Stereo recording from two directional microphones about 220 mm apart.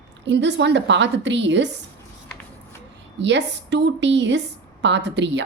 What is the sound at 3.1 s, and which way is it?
A woman's voice, 55° right (ahead or behind).